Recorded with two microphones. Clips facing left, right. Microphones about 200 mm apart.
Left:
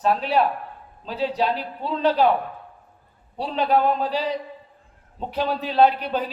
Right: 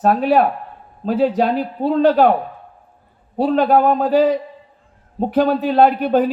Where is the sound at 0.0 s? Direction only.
50° right (ahead or behind).